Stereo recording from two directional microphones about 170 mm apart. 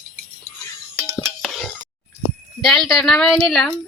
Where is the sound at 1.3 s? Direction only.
Centre (ahead or behind).